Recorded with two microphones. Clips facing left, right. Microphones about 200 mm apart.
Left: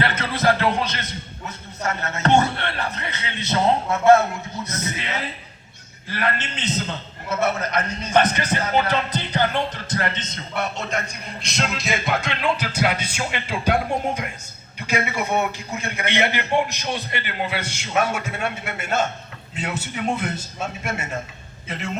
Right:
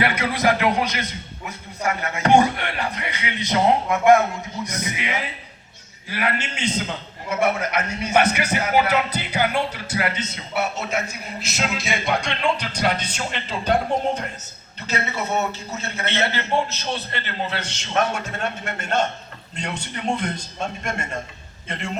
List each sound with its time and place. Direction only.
0.0 s a man's voice: 10° right (ahead or behind)